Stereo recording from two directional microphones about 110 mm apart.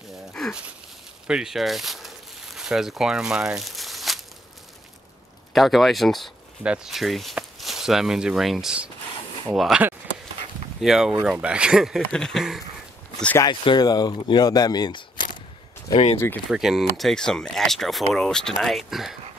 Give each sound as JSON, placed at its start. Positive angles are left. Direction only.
{"t": 0.3, "sound": "a sound", "side_deg": 5}
{"t": 5.5, "sound": "speech", "side_deg": 0}
{"t": 13.4, "sound": "speech", "side_deg": 40}
{"t": 15.9, "sound": "speech", "side_deg": 65}
{"t": 16.4, "sound": "speech", "side_deg": -5}